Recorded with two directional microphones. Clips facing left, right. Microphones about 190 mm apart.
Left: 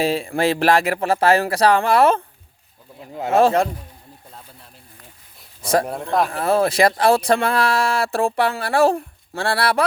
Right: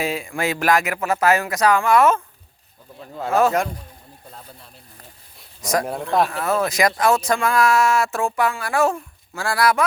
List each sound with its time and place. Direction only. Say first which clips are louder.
0.0 s speech: left 5 dB; 30° left (ahead or behind)
3.0 s speech: left 2 dB; 20° left (ahead or behind)
6.3 s speech: left 3 dB; 30° left (ahead or behind)